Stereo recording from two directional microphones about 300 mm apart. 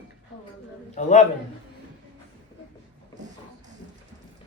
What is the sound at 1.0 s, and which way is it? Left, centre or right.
Speech, left.